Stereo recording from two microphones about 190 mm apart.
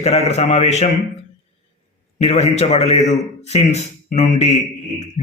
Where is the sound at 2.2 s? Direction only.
35° left (ahead or behind).